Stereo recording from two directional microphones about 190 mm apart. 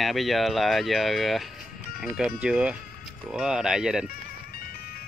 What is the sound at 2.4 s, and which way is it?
Speech, 5° right (ahead or behind).